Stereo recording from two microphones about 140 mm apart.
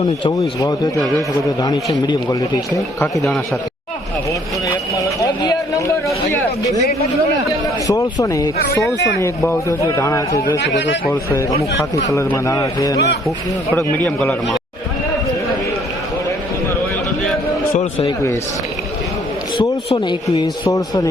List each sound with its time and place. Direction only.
0.3 s a man's voice: 25° left (ahead or behind)
2.0 s a man's voice: 25° left (ahead or behind)
4.9 s speech: 25° left (ahead or behind)
7.9 s a man's voice: 25° left (ahead or behind)
13.7 s a man's voice: 10° left (ahead or behind)
18.0 s a man's voice: 20° left (ahead or behind)
19.9 s a man's voice: 40° left (ahead or behind)
20.7 s a man's voice: 25° left (ahead or behind)